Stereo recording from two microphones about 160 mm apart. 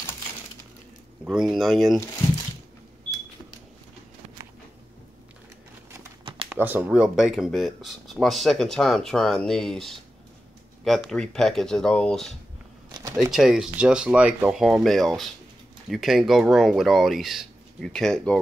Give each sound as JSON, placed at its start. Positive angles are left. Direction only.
{"t": 1.2, "sound": "speech", "side_deg": -5}
{"t": 6.2, "sound": "a sound", "side_deg": -35}
{"t": 6.5, "sound": "speech", "side_deg": -10}